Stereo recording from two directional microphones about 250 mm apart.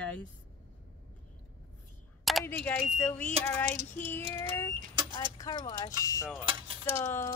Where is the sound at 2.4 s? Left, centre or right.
Centre.